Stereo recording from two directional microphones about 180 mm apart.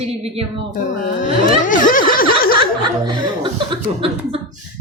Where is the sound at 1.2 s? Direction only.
45° left (ahead or behind).